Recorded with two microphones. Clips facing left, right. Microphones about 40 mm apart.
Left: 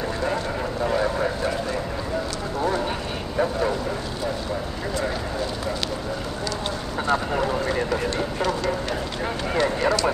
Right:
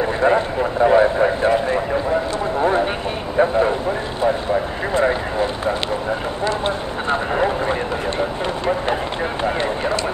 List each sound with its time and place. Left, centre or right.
0.2 s speech: right
4.9 s speech: right
6.4 s vehicle: right
9.4 s a sound: right